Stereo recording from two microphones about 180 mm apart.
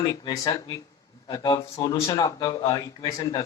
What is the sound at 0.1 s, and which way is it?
A man's voice, 20° left (ahead or behind).